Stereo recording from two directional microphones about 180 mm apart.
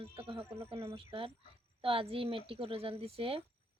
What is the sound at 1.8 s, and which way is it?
Speech, 30° right (ahead or behind).